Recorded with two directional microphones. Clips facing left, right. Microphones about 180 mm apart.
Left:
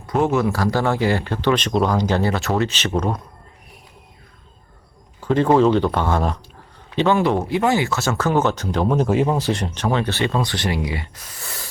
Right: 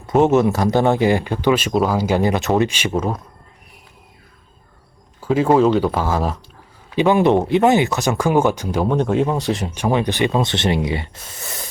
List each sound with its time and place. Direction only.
0.1 s speech: 20° right (ahead or behind); by 3.2 s 5° right (ahead or behind)
5.2 s speech: 5° right (ahead or behind)